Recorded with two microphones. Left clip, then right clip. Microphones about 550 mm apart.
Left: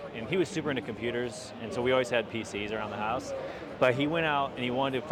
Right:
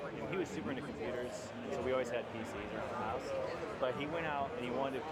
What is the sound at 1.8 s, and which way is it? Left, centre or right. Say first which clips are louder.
Speech: left 10 dB; left.